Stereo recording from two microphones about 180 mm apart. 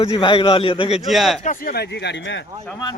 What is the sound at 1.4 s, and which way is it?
Speech, 55° left (ahead or behind).